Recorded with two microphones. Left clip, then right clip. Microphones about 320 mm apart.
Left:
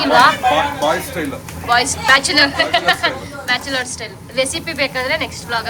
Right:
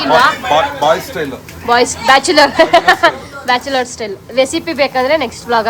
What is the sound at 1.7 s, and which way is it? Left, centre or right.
A woman's voice, centre.